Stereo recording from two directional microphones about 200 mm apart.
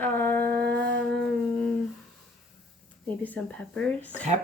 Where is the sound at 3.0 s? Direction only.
5° left (ahead or behind).